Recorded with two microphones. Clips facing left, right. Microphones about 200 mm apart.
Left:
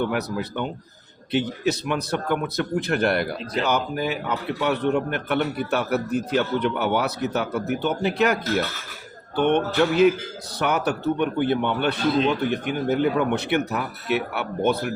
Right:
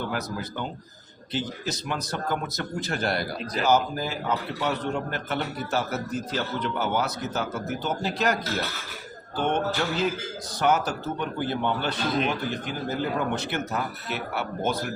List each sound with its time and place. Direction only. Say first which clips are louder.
0.0 s a man's voice: left 6 dB; 65° left (ahead or behind)
3.3 s speech: left 3 dB; 25° left (ahead or behind)
3.6 s a man's voice: right 1 dB; 65° left (ahead or behind)